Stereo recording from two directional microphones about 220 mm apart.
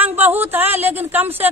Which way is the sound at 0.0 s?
10° right (ahead or behind).